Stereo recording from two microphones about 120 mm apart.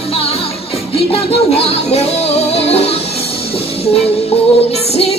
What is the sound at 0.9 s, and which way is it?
Music, 55° left (ahead or behind).